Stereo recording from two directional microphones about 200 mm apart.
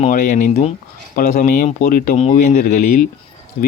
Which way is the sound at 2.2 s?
35° left (ahead or behind).